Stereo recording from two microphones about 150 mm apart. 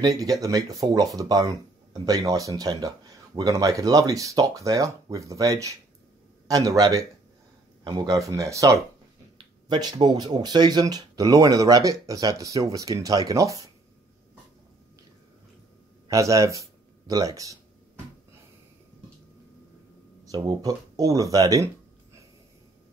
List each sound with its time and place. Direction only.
0.0 s speech: 25° right (ahead or behind)
16.1 s speech: 20° right (ahead or behind)
20.2 s speech: 25° right (ahead or behind)